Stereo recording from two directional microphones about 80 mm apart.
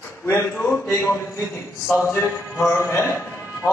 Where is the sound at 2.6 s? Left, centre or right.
Left.